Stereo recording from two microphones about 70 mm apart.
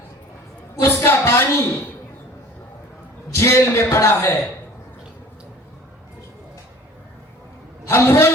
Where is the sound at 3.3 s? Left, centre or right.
Left.